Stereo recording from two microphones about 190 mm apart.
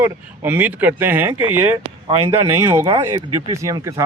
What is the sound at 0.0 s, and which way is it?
Speech, 10° right (ahead or behind).